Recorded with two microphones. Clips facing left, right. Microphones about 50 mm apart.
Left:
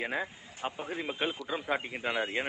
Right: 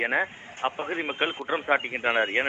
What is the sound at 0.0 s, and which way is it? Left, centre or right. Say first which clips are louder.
A man's voice: right 8 dB; right.